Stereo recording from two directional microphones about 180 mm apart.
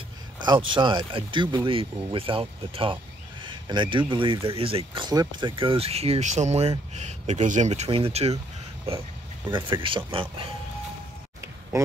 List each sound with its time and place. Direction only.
0.4 s a sound: 25° right (ahead or behind)
0.7 s speech: 25° right (ahead or behind)
9.5 s speech: 25° right (ahead or behind)